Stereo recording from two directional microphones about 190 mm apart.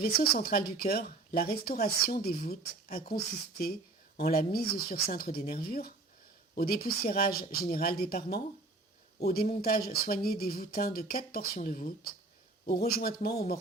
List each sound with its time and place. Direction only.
0.0 s speech: 50° left (ahead or behind)
12.9 s speech: 55° left (ahead or behind)